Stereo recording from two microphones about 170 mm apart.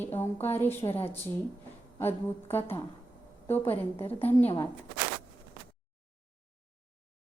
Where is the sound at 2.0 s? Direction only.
15° left (ahead or behind).